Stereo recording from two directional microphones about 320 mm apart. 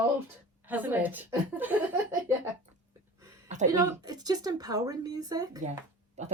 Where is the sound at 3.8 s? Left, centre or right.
Centre.